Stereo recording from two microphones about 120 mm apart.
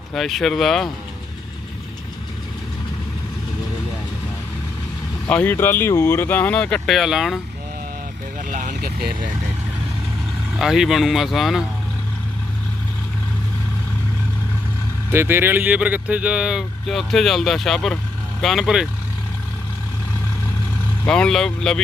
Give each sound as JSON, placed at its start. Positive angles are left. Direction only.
{"t": 0.1, "sound": "speech", "side_deg": 0}
{"t": 5.3, "sound": "speech", "side_deg": 15}
{"t": 8.4, "sound": "vehicle", "side_deg": -90}
{"t": 10.6, "sound": "speech", "side_deg": -5}
{"t": 15.1, "sound": "speech", "side_deg": -20}
{"t": 21.1, "sound": "speech", "side_deg": 5}